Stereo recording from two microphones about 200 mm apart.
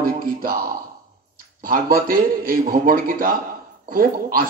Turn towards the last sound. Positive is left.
turn(degrees=-45)  # may be behind; listen again after turning